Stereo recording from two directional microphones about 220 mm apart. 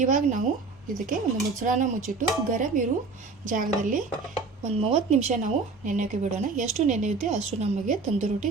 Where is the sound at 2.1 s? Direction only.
40° right (ahead or behind).